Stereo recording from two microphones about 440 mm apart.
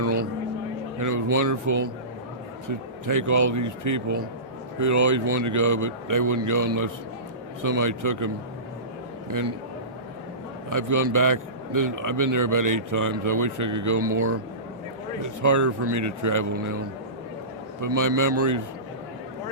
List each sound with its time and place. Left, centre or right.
0.9 s a man's voice: right
10.7 s a man's voice: right
17.7 s a man's voice: right